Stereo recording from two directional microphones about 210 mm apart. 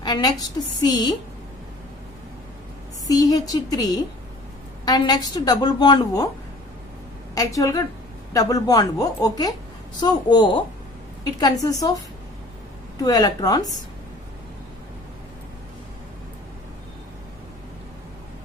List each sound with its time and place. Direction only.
0.0 s a woman's voice: 20° left (ahead or behind)
3.1 s a woman's voice: 20° left (ahead or behind)
7.3 s a woman's voice: 15° left (ahead or behind)
13.0 s a woman's voice: 20° left (ahead or behind)